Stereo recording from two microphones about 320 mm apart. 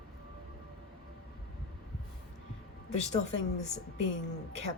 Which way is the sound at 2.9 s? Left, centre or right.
Left.